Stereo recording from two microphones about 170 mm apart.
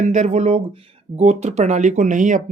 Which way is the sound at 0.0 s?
45° right (ahead or behind).